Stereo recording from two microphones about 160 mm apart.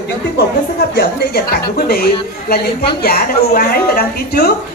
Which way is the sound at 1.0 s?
80° left.